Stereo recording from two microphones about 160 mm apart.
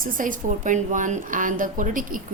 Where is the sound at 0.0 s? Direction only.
55° right (ahead or behind).